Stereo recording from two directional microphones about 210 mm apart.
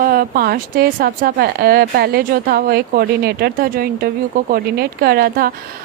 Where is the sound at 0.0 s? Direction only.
45° right (ahead or behind).